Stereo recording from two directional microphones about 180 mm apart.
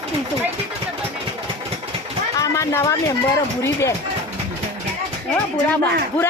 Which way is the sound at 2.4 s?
15° left (ahead or behind).